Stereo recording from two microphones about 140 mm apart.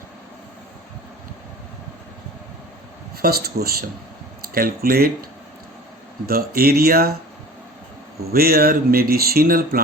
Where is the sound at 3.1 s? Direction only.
90° right.